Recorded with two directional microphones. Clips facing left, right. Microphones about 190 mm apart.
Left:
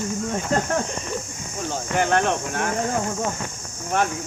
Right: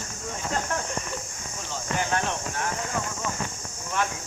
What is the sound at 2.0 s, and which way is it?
Speech, 60° left (ahead or behind).